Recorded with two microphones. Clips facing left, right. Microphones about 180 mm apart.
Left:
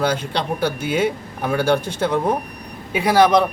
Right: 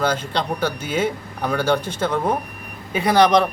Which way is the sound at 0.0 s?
10° left (ahead or behind).